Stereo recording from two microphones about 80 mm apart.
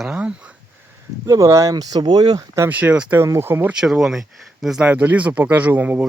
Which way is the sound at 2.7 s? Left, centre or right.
Right.